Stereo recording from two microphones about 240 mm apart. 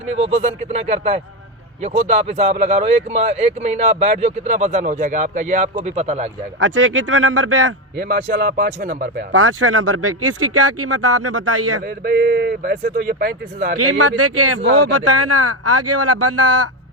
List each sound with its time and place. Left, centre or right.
0.0 s speech: right
6.6 s speech: right
8.0 s speech: right
9.3 s speech: right
12.0 s speech: right
13.7 s speech: right
14.9 s speech: right